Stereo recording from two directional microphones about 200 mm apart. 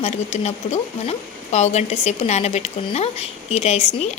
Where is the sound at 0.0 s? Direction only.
35° left (ahead or behind).